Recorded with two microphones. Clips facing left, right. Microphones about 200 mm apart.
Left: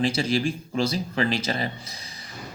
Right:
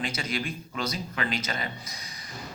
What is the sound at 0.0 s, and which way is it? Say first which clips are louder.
Speech: left 9 dB; 30° left (ahead or behind).